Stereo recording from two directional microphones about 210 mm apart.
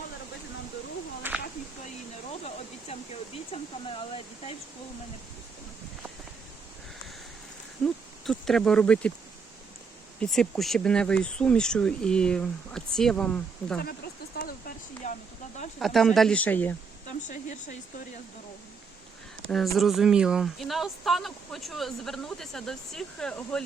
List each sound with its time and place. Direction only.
1.2 s a sound: 10° right (ahead or behind)
2.3 s a sound: 30° left (ahead or behind)
3.5 s speech: 25° left (ahead or behind)
7.9 s speech: centre (ahead or behind)
10.2 s speech: 5° left (ahead or behind)
13.7 s speech: 45° left (ahead or behind)
15.0 s speech: 35° left (ahead or behind)
15.8 s speech: centre (ahead or behind)
17.1 s speech: 35° left (ahead or behind)
19.5 s speech: centre (ahead or behind)